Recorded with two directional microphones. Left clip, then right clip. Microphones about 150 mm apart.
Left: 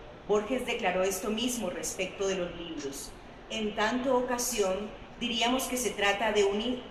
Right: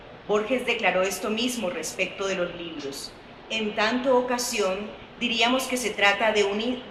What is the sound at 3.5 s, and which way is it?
A woman's voice, 30° right (ahead or behind).